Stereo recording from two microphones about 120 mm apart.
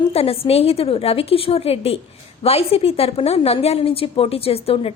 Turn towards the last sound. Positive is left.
turn(degrees=55)  # may be behind; listen again after turning